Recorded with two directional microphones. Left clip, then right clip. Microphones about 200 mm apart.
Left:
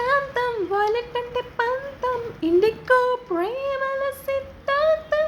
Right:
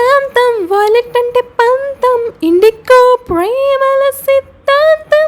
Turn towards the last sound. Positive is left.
turn(degrees=-55)  # may be behind; listen again after turning